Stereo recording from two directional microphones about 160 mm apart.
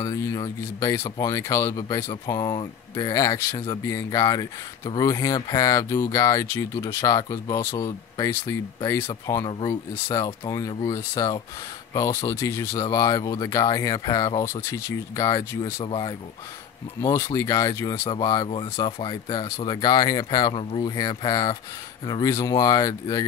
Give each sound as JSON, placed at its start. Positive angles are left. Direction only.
{"t": 0.0, "sound": "speech", "side_deg": 20}
{"t": 17.0, "sound": "speech", "side_deg": 20}
{"t": 18.6, "sound": "speech", "side_deg": 35}